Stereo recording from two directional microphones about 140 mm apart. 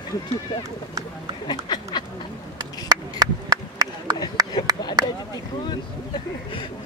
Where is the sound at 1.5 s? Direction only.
30° left (ahead or behind).